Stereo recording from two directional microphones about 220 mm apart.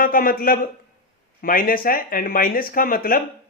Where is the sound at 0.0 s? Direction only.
40° left (ahead or behind).